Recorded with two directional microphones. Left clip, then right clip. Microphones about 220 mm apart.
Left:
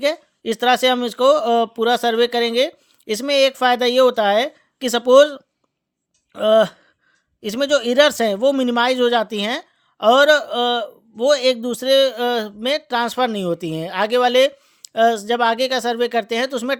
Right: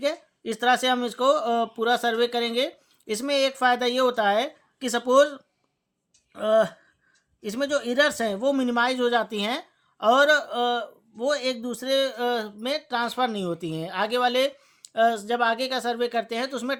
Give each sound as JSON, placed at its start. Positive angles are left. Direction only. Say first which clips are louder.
{"t": 0.0, "sound": "speech", "louder": "left 7 dB", "side_deg": 35}